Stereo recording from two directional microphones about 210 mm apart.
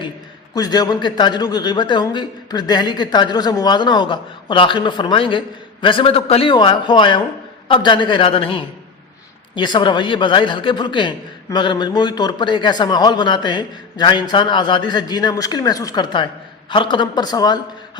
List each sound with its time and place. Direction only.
0.5 s a man's voice: 20° left (ahead or behind)